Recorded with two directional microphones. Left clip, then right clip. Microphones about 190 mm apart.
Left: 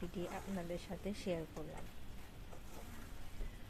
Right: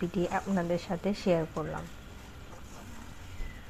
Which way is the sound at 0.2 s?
5° right (ahead or behind).